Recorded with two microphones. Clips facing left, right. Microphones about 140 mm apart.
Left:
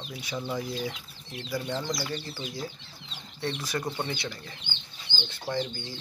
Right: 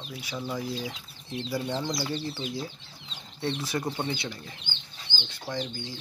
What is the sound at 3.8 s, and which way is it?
Speech, 10° right (ahead or behind).